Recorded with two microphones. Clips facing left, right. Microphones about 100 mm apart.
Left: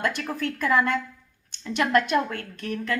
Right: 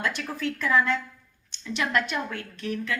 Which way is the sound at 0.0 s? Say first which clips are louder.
Left 2 dB; 45° left (ahead or behind).